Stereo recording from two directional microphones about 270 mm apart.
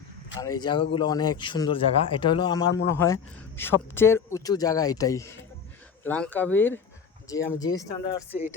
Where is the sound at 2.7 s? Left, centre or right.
Left.